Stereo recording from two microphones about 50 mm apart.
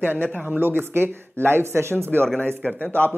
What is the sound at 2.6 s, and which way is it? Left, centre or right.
Speech, left.